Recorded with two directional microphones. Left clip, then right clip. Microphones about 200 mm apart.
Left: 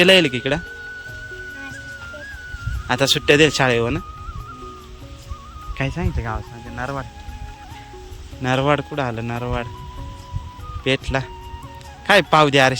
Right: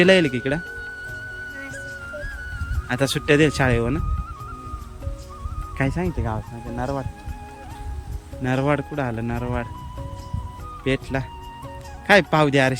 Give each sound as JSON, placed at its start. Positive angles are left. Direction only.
{"t": 0.0, "sound": "speech", "side_deg": -10}
{"t": 2.8, "sound": "speech", "side_deg": -10}
{"t": 5.7, "sound": "speech", "side_deg": -20}
{"t": 8.4, "sound": "speech", "side_deg": -10}
{"t": 10.8, "sound": "speech", "side_deg": -10}